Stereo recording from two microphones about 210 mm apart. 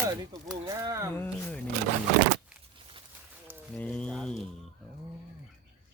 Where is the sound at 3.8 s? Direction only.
5° left (ahead or behind).